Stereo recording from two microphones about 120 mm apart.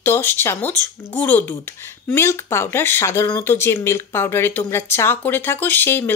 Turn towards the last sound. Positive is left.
turn(degrees=15)  # may be behind; listen again after turning